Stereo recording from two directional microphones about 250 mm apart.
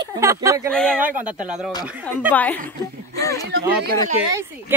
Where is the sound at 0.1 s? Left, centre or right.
Centre.